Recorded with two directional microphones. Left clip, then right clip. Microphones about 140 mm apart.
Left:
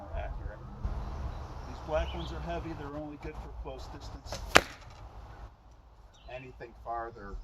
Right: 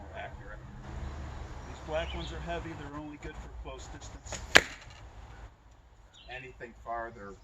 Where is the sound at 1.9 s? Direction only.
30° left (ahead or behind).